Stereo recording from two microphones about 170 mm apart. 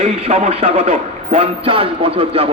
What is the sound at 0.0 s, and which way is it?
A man's voice, 35° right (ahead or behind).